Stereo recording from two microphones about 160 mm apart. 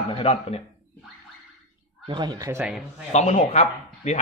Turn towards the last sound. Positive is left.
turn(degrees=45)  # may be behind; listen again after turning